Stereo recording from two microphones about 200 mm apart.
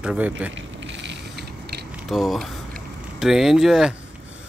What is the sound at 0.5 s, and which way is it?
Mechanisms, 65° right (ahead or behind).